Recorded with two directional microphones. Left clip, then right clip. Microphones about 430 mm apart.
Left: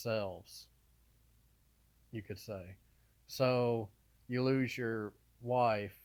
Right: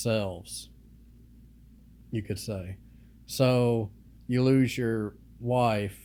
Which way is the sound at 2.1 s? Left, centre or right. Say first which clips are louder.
Right 9 dB; left.